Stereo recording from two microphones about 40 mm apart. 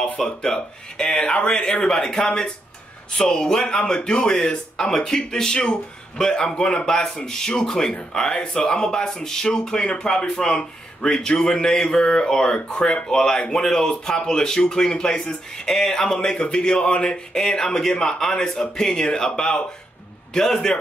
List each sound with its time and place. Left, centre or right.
0.0 s speech: centre